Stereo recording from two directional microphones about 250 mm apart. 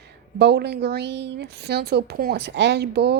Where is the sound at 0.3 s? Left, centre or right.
Right.